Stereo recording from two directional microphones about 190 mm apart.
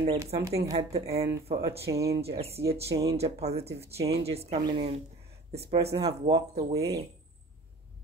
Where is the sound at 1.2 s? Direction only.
30° right (ahead or behind).